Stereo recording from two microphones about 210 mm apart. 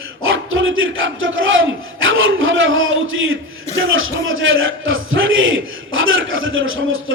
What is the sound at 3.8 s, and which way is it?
A man's voice, 70° right (ahead or behind).